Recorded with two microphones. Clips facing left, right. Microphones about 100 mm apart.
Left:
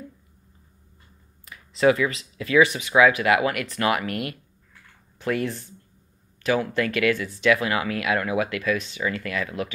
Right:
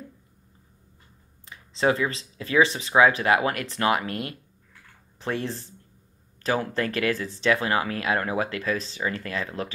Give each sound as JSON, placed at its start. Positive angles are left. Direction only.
{"t": 1.4, "sound": "speech", "side_deg": -30}